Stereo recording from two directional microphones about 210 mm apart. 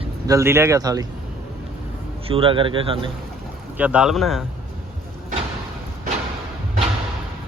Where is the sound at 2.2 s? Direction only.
25° right (ahead or behind).